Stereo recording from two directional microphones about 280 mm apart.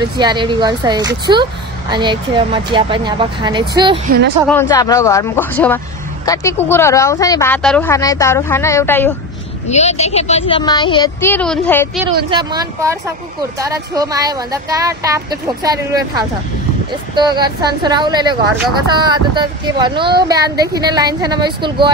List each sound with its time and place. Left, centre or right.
0.0 s speech: centre
4.5 s speech: centre
9.7 s speech: left; by 11.9 s centre
12.3 s speech: centre